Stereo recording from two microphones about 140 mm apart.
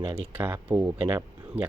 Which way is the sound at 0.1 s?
15° right (ahead or behind).